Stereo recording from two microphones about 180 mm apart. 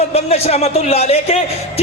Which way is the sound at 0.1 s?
35° left (ahead or behind).